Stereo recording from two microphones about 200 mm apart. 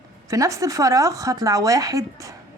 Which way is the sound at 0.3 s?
15° right (ahead or behind).